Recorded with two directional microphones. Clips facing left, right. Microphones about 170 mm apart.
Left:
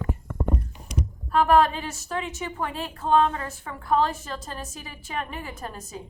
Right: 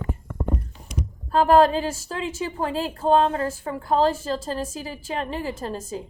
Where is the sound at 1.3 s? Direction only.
35° right (ahead or behind).